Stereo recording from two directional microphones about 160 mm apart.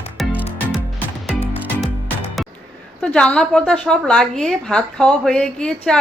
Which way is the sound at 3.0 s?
5° left (ahead or behind).